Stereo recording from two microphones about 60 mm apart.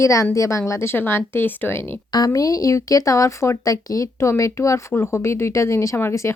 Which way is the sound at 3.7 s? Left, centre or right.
Left.